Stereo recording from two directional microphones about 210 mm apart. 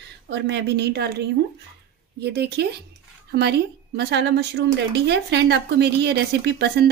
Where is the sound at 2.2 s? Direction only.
50° right (ahead or behind).